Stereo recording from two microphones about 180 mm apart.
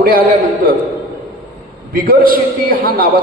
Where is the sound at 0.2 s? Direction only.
55° right (ahead or behind).